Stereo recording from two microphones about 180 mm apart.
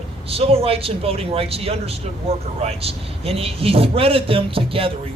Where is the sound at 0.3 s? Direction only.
30° right (ahead or behind).